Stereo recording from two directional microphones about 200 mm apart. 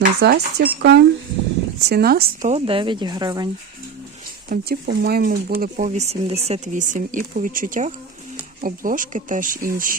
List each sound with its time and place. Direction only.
0.0 s speech: 55° right (ahead or behind)
2.5 s speech: 30° right (ahead or behind)
4.4 s speech: 45° right (ahead or behind)